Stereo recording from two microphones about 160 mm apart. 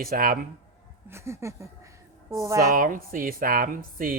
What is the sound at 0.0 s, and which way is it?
Speech, 65° right (ahead or behind).